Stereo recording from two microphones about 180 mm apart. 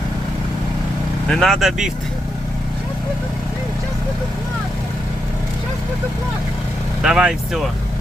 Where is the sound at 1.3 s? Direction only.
Centre (ahead or behind).